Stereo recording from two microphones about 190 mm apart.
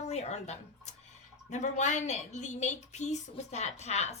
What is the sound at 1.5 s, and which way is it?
A woman's voice, 40° left (ahead or behind).